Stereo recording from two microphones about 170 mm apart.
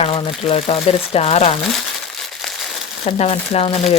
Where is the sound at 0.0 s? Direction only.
35° left (ahead or behind).